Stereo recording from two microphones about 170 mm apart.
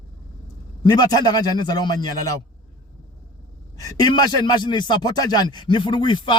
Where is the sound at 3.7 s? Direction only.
20° left (ahead or behind).